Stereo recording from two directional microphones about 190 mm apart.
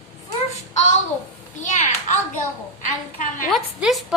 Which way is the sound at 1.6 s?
40° left (ahead or behind).